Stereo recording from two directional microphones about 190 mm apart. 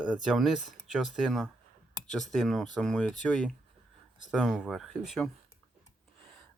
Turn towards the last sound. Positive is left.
turn(degrees=0)  # may be behind; listen again after turning